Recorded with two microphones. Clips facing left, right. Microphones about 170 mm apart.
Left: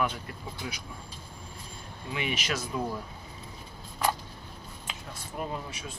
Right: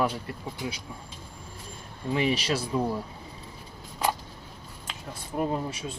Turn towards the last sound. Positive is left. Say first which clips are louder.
# right 7 dB
turn(degrees=-35)  # may be behind; listen again after turning